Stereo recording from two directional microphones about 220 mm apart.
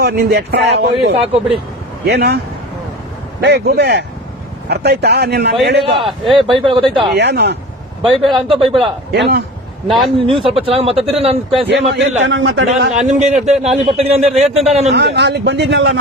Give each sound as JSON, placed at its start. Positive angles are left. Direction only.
{"t": 0.0, "sound": "speech", "side_deg": -45}
{"t": 1.1, "sound": "a man's voice", "side_deg": -25}
{"t": 2.0, "sound": "speech", "side_deg": -45}
{"t": 3.4, "sound": "speech", "side_deg": -50}
{"t": 6.0, "sound": "a man's voice", "side_deg": 0}
{"t": 6.3, "sound": "a man's voice", "side_deg": -20}
{"t": 7.2, "sound": "speech", "side_deg": -50}
{"t": 8.0, "sound": "a man's voice", "side_deg": -20}
{"t": 9.1, "sound": "speech", "side_deg": -50}
{"t": 9.8, "sound": "a man's voice", "side_deg": 0}
{"t": 10.4, "sound": "a man's voice", "side_deg": -25}
{"t": 11.7, "sound": "a man's voice", "side_deg": -55}
{"t": 13.0, "sound": "a man's voice", "side_deg": -30}
{"t": 14.9, "sound": "speech", "side_deg": -50}